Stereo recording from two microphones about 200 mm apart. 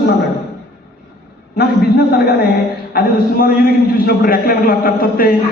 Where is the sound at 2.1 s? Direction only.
55° left (ahead or behind).